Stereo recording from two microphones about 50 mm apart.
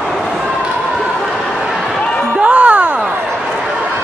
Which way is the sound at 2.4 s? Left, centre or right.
Right.